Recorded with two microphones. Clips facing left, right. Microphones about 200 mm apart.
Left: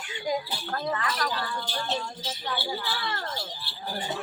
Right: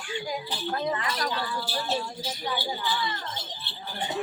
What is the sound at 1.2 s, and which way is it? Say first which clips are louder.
Speech: right 1 dB; centre (ahead or behind).